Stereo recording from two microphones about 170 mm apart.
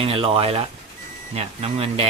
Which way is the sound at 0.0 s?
35° right (ahead or behind).